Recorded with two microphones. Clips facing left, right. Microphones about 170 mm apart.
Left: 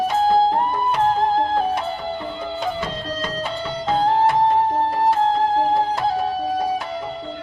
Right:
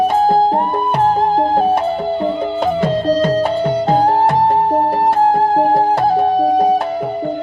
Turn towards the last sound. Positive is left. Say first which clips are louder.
# right 6 dB
turn(degrees=-55)  # may be behind; listen again after turning